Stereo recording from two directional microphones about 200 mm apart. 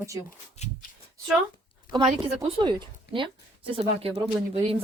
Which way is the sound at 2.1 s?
30° right (ahead or behind).